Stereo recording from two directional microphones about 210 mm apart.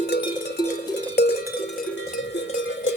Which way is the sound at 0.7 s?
50° left (ahead or behind).